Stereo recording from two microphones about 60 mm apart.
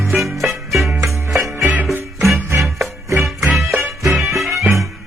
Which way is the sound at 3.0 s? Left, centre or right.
Right.